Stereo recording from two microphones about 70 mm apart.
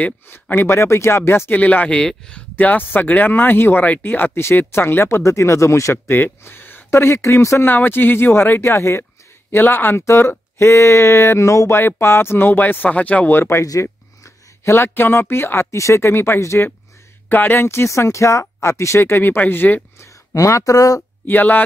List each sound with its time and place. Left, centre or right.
0.3 s speech: left
1.5 s speech: left
2.5 s speech: left
6.1 s speech: left
7.6 s speech: left
9.5 s speech: left
13.4 s speech: left
17.3 s speech: left
20.0 s speech: left
21.3 s speech: left